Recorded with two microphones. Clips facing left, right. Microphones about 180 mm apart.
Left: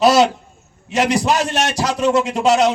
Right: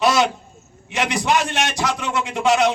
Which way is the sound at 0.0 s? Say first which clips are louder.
Left 5 dB; 40° left (ahead or behind).